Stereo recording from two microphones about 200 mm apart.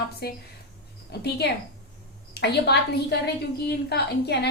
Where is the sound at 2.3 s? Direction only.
55° left (ahead or behind).